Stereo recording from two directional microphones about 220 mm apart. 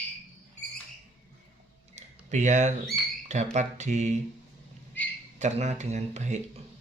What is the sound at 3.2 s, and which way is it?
Speech, 30° right (ahead or behind).